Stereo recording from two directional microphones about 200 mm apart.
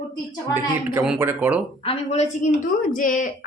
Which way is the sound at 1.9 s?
35° left (ahead or behind).